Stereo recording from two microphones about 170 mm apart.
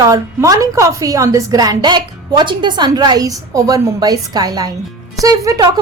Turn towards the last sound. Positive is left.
turn(degrees=-20)  # may be behind; listen again after turning